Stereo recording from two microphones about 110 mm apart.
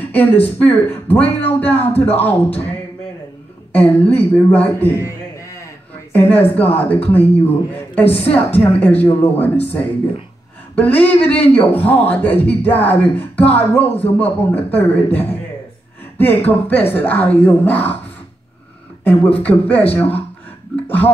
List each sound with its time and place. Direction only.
0.1 s speech: 15° left (ahead or behind)
3.7 s a man's voice: 15° left (ahead or behind)
10.8 s speech: 15° left (ahead or behind)
19.4 s speech: 15° left (ahead or behind)
20.8 s speech: 15° left (ahead or behind)